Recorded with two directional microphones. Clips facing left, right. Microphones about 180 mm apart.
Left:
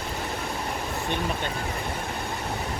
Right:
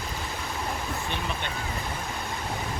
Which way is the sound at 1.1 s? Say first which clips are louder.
Left 4 dB; 45° left (ahead or behind).